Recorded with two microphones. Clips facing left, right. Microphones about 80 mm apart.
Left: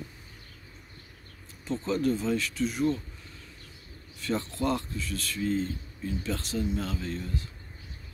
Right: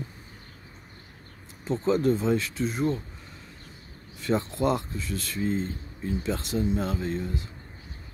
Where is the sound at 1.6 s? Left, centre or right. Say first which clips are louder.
Right 4 dB; right.